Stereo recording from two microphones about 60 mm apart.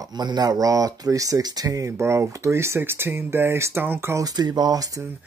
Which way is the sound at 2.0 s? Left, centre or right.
Right.